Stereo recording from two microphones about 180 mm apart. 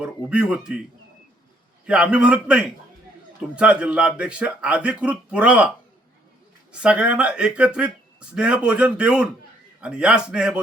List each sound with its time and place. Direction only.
0.0 s speech: 5° right (ahead or behind)
1.9 s speech: 5° right (ahead or behind)